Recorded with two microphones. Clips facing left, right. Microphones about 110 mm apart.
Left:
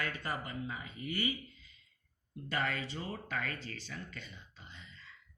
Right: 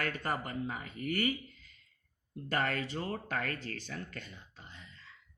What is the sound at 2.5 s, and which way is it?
Speech, 50° right (ahead or behind).